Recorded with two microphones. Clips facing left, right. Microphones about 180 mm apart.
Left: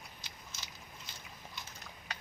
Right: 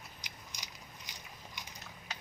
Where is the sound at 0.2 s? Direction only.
15° right (ahead or behind).